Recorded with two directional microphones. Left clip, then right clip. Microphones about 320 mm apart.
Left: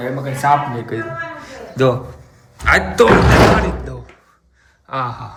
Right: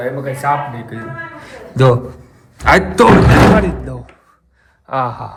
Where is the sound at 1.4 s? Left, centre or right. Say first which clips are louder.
Right 2 dB; centre.